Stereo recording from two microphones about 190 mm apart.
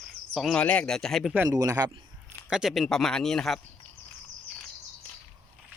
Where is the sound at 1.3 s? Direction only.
10° right (ahead or behind).